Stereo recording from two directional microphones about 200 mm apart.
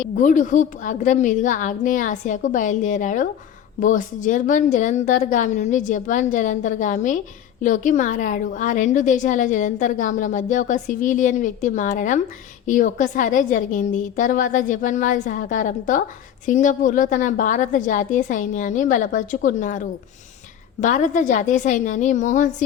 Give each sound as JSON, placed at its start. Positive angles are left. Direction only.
{"t": 0.0, "sound": "a woman's voice", "side_deg": 40}